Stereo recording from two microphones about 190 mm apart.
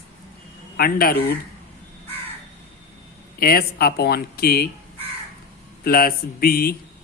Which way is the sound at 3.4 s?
50° left (ahead or behind).